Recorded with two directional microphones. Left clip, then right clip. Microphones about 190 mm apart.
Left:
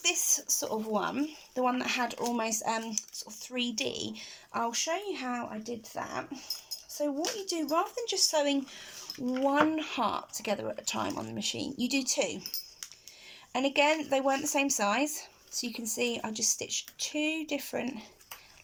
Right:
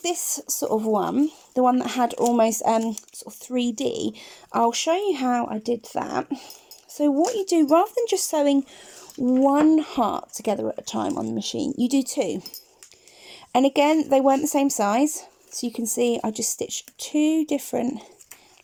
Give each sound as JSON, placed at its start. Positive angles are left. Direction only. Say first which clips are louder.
{"t": 0.0, "sound": "speech", "louder": "right 2 dB", "side_deg": -40}
{"t": 13.5, "sound": "speech", "louder": "right 8 dB", "side_deg": -40}